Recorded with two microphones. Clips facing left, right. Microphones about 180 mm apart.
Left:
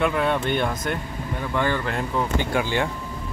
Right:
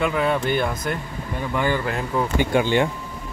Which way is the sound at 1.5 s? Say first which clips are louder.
Right 1 dB; 10° right (ahead or behind).